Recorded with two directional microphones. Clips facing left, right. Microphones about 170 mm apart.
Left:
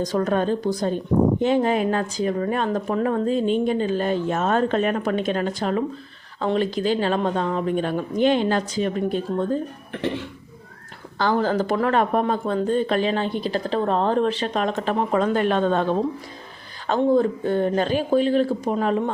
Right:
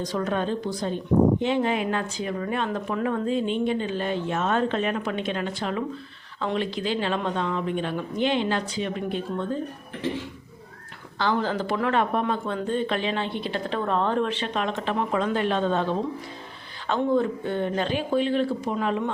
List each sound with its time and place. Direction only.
0.0 s speech: 45° left (ahead or behind)
9.9 s speech: 65° left (ahead or behind)
11.2 s speech: 45° left (ahead or behind)
16.8 s speech: 40° left (ahead or behind)